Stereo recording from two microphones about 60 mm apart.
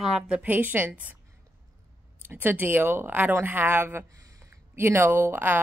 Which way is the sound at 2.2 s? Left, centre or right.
Right.